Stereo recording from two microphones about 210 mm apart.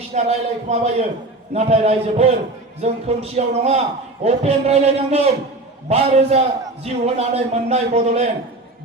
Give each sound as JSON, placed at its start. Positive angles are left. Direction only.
{"t": 0.1, "sound": "a man's voice", "side_deg": -30}